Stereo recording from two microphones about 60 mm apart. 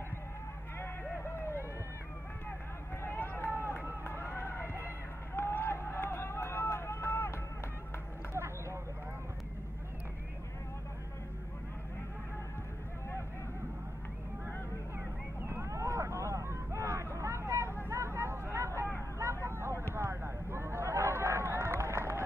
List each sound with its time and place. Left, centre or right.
1.2 s a sound: left
3.0 s run: left
8.3 s vehicle: right
15.4 s vehicle: right
17.8 s hubbub: right
19.1 s vehicle: right
19.9 s a sound: right